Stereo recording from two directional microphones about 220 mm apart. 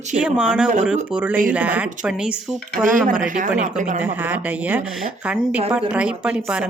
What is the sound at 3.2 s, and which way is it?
Speech, 35° right (ahead or behind).